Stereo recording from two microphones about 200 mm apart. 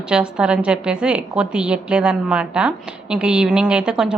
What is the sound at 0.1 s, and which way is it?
A woman's voice, 5° right (ahead or behind).